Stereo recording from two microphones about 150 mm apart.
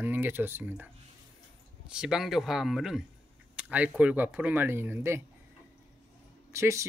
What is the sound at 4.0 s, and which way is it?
Speech, 10° right (ahead or behind).